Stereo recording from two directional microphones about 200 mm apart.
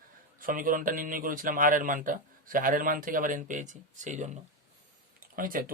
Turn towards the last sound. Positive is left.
turn(degrees=-45)  # may be behind; listen again after turning